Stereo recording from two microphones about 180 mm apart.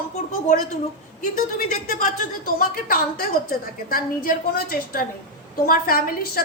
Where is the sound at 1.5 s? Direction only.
55° left (ahead or behind).